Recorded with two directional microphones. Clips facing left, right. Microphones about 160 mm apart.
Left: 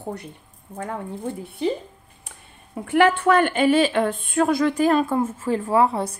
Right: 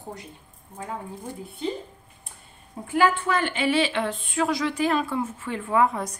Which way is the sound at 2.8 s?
70° left (ahead or behind).